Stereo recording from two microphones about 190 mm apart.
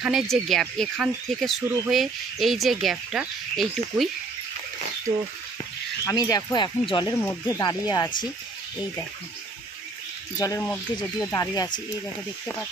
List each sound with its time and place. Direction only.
0.0 s speech: centre (ahead or behind)
6.0 s speech: 15° left (ahead or behind)
7.2 s speech: 15° left (ahead or behind)
10.4 s speech: 15° left (ahead or behind)